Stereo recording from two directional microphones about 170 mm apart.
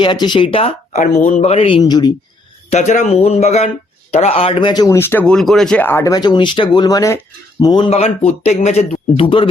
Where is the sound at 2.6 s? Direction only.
40° left (ahead or behind); by 7.9 s 25° left (ahead or behind).